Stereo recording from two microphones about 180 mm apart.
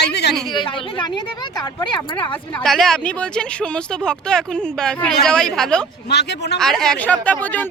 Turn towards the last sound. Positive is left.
turn(degrees=10)  # may be behind; listen again after turning